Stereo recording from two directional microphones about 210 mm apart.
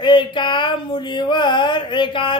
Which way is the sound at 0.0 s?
25° left (ahead or behind).